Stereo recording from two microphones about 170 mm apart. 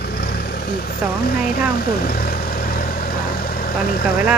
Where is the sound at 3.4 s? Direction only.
60° left (ahead or behind).